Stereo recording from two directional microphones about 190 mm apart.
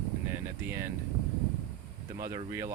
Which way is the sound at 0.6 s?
10° right (ahead or behind).